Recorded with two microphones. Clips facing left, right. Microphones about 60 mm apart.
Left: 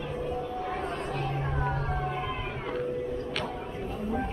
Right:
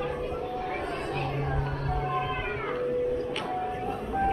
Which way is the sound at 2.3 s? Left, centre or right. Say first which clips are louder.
Right 3 dB; right.